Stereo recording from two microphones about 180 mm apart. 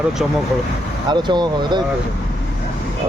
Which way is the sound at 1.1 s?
25° right (ahead or behind).